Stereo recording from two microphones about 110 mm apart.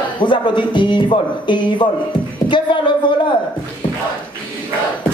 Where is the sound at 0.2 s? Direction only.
45° left (ahead or behind).